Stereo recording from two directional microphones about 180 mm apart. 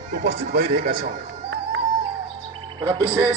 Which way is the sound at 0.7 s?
55° right (ahead or behind).